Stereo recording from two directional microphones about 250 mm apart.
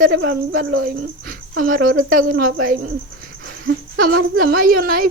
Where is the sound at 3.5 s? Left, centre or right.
Right.